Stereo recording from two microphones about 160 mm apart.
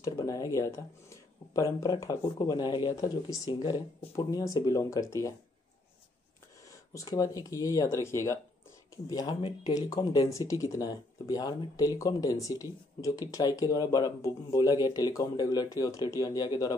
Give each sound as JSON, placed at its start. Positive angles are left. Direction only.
{"t": 0.0, "sound": "speech", "side_deg": 20}
{"t": 6.9, "sound": "speech", "side_deg": 20}